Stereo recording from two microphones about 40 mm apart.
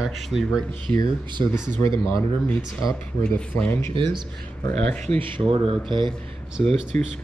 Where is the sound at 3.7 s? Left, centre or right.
Left.